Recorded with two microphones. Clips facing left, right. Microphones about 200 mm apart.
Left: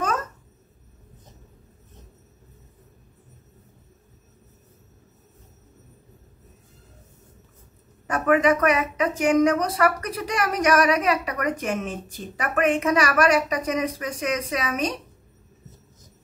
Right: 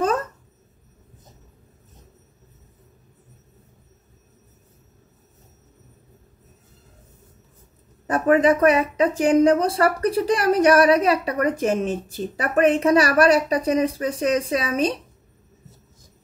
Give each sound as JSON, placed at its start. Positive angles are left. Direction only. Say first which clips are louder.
{"t": 8.1, "sound": "speech", "louder": "right 3 dB", "side_deg": -30}